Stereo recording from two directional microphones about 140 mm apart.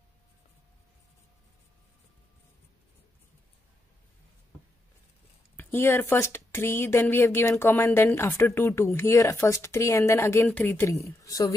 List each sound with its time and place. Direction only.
5.6 s speech: 15° left (ahead or behind)